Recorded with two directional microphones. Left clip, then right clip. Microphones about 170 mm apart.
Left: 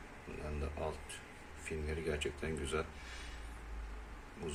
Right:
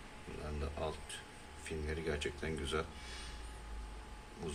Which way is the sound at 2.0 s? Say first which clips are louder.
Left 1 dB; 10° left (ahead or behind).